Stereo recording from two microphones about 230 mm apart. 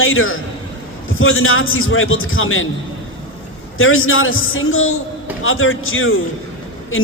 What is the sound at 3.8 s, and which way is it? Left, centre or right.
A man's voice, left.